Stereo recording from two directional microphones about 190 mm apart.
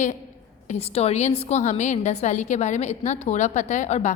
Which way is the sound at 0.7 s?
30° left (ahead or behind).